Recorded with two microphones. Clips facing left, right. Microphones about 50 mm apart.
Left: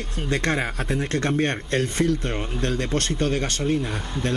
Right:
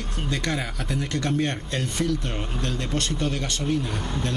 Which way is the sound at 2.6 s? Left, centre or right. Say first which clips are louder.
Left 4 dB; left.